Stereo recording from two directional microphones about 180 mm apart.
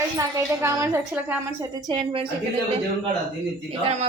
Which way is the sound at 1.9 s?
25° right (ahead or behind).